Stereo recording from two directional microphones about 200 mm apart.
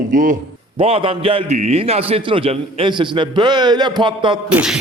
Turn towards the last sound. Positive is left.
turn(degrees=-5)  # may be behind; listen again after turning